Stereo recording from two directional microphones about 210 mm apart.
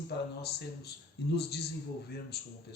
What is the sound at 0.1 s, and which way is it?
Speech, 50° left (ahead or behind).